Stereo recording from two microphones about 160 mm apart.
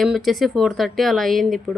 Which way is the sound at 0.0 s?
Centre (ahead or behind).